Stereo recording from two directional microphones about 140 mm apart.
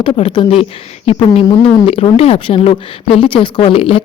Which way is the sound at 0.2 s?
40° left (ahead or behind).